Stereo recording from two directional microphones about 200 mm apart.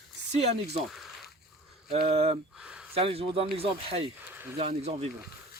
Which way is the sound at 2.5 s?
5° right (ahead or behind).